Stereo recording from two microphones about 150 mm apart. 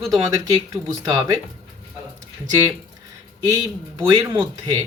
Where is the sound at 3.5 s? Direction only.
25° right (ahead or behind).